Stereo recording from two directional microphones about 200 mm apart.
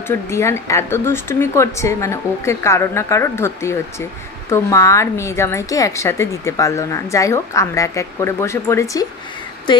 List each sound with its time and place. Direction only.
0.1 s a woman's voice: 15° left (ahead or behind)